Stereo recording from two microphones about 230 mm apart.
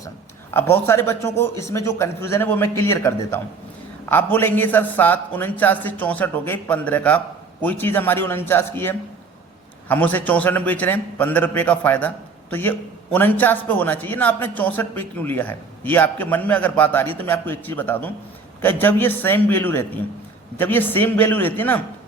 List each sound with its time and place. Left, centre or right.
0.5 s a man's voice: centre